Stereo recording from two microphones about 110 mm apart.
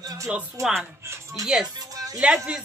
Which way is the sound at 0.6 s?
30° right (ahead or behind).